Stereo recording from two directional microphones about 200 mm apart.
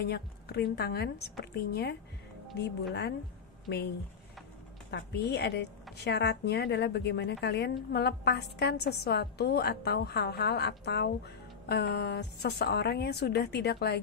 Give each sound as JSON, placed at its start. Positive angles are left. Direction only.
{"t": 0.0, "sound": "a woman's voice", "side_deg": 55}
{"t": 4.9, "sound": "a woman's voice", "side_deg": 60}